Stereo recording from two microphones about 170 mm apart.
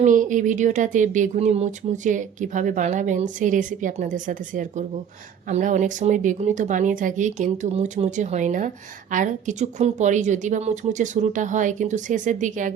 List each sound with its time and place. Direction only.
0.0 s speech: 50° right (ahead or behind)